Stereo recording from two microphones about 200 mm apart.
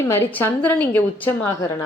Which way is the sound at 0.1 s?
10° left (ahead or behind).